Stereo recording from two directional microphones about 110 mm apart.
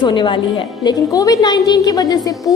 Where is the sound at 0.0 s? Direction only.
45° left (ahead or behind).